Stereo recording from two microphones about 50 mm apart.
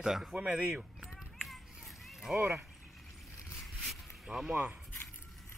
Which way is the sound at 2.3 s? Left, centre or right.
Right.